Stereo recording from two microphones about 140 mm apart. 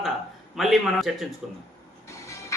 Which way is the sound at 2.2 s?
20° left (ahead or behind).